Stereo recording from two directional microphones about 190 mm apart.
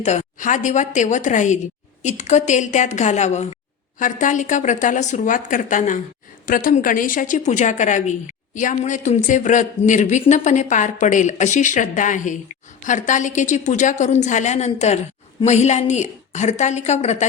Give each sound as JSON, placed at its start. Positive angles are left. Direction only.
{"t": 0.0, "sound": "a woman's voice", "side_deg": 35}